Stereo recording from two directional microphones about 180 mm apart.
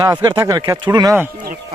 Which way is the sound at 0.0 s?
20° right (ahead or behind).